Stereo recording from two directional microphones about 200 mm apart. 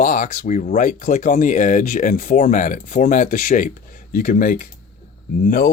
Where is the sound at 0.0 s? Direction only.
40° left (ahead or behind).